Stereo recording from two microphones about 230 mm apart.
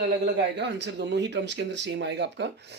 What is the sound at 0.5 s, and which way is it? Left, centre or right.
Speech, right.